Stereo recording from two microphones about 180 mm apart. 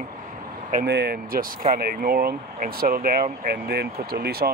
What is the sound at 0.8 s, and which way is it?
Speech, 65° right (ahead or behind).